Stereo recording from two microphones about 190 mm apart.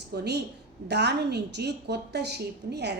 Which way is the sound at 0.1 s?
60° right (ahead or behind).